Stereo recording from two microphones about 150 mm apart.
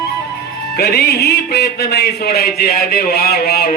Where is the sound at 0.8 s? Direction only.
90° left.